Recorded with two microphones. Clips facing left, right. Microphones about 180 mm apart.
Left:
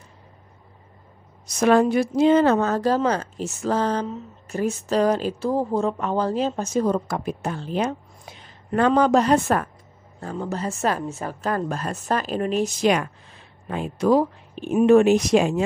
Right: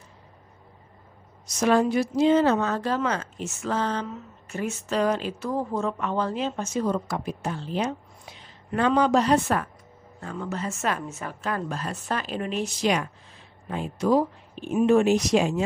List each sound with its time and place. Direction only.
1.4 s speech: 60° left (ahead or behind)
10.2 s speech: 35° left (ahead or behind); by 13.1 s 55° left (ahead or behind)
13.7 s speech: 70° left (ahead or behind)